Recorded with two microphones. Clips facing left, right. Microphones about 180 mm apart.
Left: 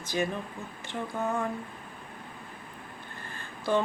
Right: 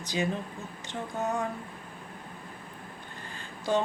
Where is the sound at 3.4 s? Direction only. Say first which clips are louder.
Left 1 dB; 15° right (ahead or behind).